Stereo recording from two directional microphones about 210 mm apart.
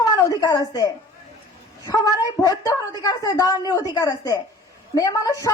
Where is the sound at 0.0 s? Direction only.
15° left (ahead or behind).